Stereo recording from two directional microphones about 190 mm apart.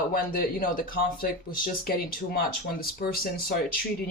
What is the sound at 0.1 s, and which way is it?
Speech, 50° left (ahead or behind).